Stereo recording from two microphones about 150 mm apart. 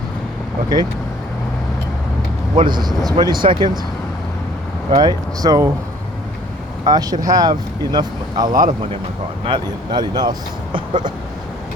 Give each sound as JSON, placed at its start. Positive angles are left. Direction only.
{"t": 2.6, "sound": "speech", "side_deg": -30}
{"t": 4.9, "sound": "speech", "side_deg": -25}
{"t": 6.8, "sound": "speech", "side_deg": -25}